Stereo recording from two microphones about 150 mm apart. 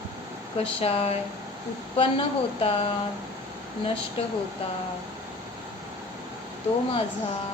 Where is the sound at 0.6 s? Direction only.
40° left (ahead or behind).